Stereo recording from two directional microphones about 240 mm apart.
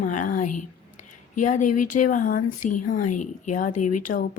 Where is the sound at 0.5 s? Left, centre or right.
Left.